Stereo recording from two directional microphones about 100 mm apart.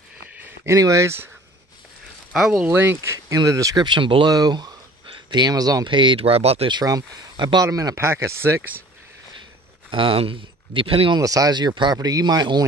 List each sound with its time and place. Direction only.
0.4 s a sound: 20° right (ahead or behind)
0.7 s speech: 35° right (ahead or behind)
2.3 s speech: 5° right (ahead or behind)
2.6 s speech: 20° right (ahead or behind)
3.8 s speech: 50° right (ahead or behind)
4.3 s speech: 40° right (ahead or behind)
5.9 s speech: 55° right (ahead or behind); by 6.7 s 85° right
6.7 s speech: 40° right (ahead or behind)
7.6 s speech: 35° right (ahead or behind)
9.8 s speech: 60° right (ahead or behind)
11.1 s speech: 35° right (ahead or behind)